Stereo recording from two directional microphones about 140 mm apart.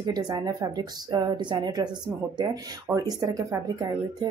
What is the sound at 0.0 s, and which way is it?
Speech, 30° right (ahead or behind).